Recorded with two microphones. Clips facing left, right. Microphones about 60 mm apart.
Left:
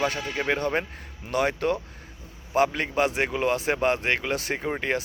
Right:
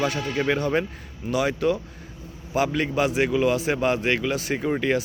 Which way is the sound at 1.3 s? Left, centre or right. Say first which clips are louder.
Right 2 dB; left.